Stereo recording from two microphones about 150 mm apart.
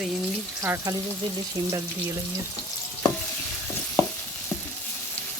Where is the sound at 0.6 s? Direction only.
20° right (ahead or behind).